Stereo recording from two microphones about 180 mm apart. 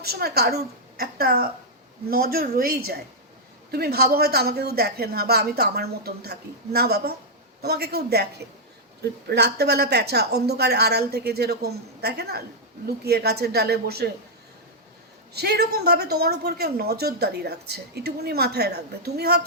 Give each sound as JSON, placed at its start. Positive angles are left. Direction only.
{"t": 0.0, "sound": "a woman's voice", "side_deg": -60}
{"t": 15.3, "sound": "a woman's voice", "side_deg": -65}